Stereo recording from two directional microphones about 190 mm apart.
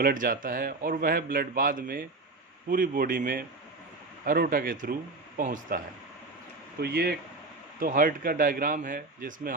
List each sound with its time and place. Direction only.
0.0 s a man's voice: 45° right (ahead or behind)
6.7 s a man's voice: 55° right (ahead or behind)